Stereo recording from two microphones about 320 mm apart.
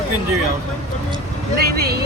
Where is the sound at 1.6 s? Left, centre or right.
Right.